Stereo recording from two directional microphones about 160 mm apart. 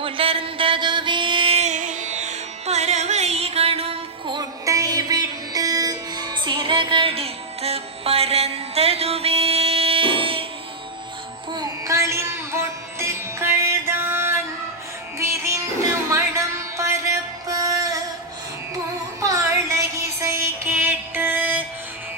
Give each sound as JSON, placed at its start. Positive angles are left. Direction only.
{"t": 0.0, "sound": "music", "side_deg": -35}
{"t": 4.4, "sound": "music", "side_deg": -20}
{"t": 11.5, "sound": "music", "side_deg": -20}
{"t": 16.1, "sound": "music", "side_deg": -15}
{"t": 19.2, "sound": "a sound", "side_deg": -20}
{"t": 20.1, "sound": "music", "side_deg": -15}